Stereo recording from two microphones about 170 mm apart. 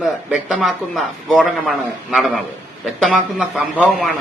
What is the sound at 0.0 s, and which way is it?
A man's voice, 5° right (ahead or behind).